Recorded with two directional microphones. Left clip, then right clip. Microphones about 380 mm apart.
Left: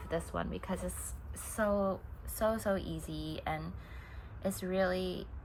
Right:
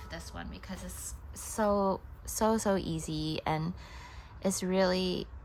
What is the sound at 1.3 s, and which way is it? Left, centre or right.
A woman's voice, centre.